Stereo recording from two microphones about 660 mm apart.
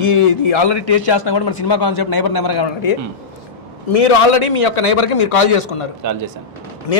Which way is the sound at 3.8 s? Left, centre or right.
Left.